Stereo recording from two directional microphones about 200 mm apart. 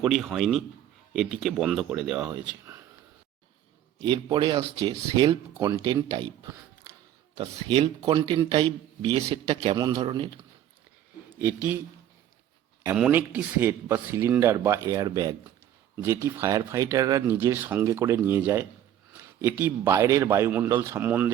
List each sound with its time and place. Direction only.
0.0 s speech: centre (ahead or behind)
4.0 s a man's voice: 25° right (ahead or behind)
11.3 s speech: 10° right (ahead or behind)
12.8 s speech: 10° right (ahead or behind)